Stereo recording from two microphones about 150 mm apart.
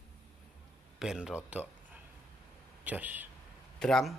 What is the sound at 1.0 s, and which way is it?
Speech, 5° right (ahead or behind).